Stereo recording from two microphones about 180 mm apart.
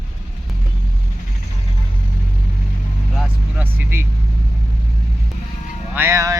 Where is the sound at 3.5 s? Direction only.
10° right (ahead or behind).